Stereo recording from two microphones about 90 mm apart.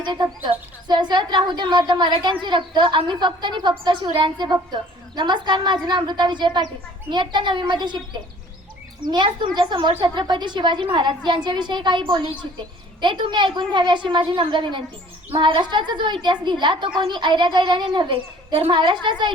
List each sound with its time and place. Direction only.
0.0 s speech: 55° right (ahead or behind)
15.3 s speech: 75° right (ahead or behind)